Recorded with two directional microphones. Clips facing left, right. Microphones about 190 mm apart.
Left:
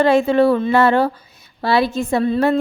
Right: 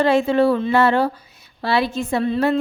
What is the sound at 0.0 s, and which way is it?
A woman's voice, 50° left (ahead or behind).